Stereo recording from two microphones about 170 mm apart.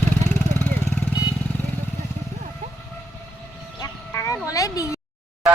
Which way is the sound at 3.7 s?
20° left (ahead or behind).